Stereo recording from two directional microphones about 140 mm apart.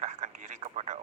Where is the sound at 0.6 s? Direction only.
50° right (ahead or behind).